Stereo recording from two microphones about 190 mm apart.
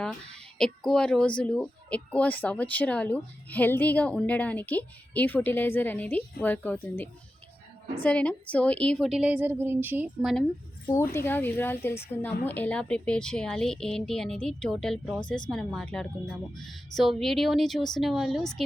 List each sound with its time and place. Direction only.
0.0 s a woman's voice: 5° left (ahead or behind)
10.8 s a woman's voice: 15° left (ahead or behind)